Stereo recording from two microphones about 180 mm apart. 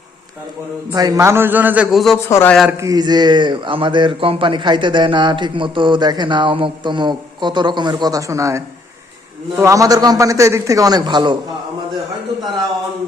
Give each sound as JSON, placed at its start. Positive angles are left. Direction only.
{"t": 0.9, "sound": "a man's voice", "side_deg": -20}
{"t": 2.3, "sound": "a man's voice", "side_deg": 10}
{"t": 2.7, "sound": "speech", "side_deg": -20}